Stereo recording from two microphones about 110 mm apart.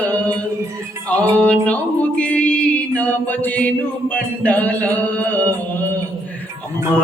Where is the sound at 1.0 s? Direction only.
15° left (ahead or behind).